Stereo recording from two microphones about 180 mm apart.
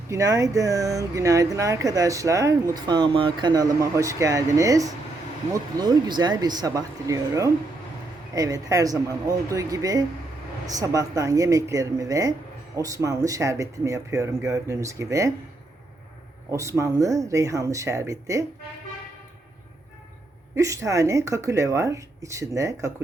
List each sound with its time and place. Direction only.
0.1 s speech: 15° right (ahead or behind)
16.5 s speech: 15° right (ahead or behind)
20.6 s speech: 15° right (ahead or behind)